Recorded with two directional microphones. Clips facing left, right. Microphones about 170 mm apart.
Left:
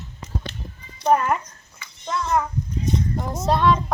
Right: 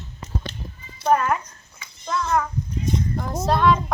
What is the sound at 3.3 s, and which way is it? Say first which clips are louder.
Speech: even; centre (ahead or behind).